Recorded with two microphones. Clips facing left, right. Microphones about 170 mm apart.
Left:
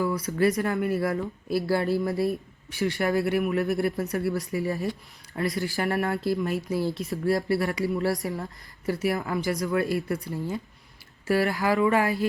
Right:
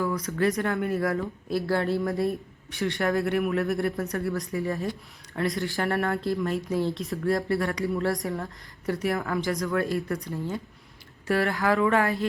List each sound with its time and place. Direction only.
0.3 s speech: 5° left (ahead or behind)
11.3 s speech: 5° left (ahead or behind)